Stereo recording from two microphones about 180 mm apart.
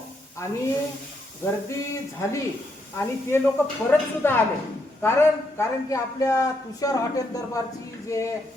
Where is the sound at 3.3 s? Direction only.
15° left (ahead or behind).